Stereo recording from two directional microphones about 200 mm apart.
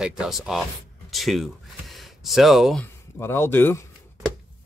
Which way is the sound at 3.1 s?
10° left (ahead or behind).